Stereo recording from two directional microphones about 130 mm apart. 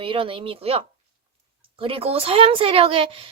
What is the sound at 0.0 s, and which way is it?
A woman's voice, 45° right (ahead or behind).